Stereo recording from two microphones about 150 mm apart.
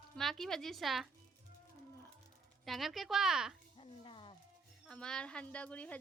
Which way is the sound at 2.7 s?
Centre (ahead or behind).